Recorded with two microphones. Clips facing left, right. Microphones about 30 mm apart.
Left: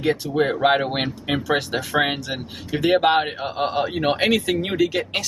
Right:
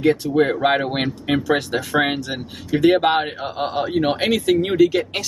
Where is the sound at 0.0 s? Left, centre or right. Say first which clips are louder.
Right 4 dB; centre.